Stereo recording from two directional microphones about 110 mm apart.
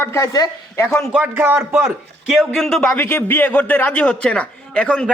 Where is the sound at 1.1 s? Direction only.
10° right (ahead or behind).